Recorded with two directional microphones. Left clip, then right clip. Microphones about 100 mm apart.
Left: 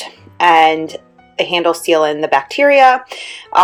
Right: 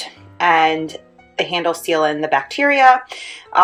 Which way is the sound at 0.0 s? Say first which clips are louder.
Left 5 dB; 35° left (ahead or behind).